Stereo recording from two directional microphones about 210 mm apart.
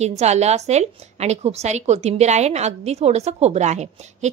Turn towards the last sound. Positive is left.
turn(degrees=-35)  # may be behind; listen again after turning